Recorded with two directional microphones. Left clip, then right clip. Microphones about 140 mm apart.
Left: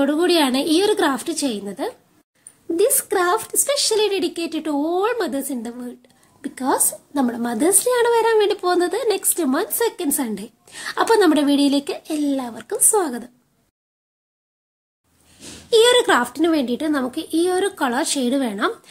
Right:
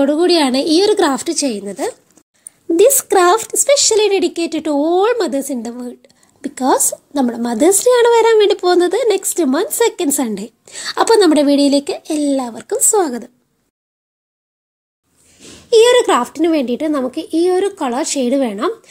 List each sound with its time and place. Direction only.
0.0 s a woman's voice: 25° right (ahead or behind)
2.7 s a woman's voice: 60° right (ahead or behind); by 13.3 s 35° right (ahead or behind)
15.7 s speech: 15° right (ahead or behind)